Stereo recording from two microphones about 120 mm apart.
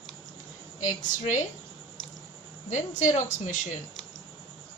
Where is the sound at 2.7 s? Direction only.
90° left.